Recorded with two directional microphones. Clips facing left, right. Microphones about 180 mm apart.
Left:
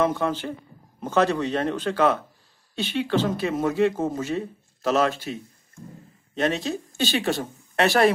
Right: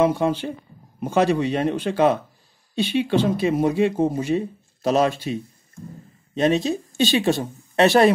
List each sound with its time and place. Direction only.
0.0 s speech: 15° right (ahead or behind)